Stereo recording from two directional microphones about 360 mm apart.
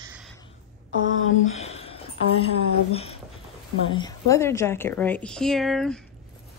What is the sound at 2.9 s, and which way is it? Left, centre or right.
Speech, centre.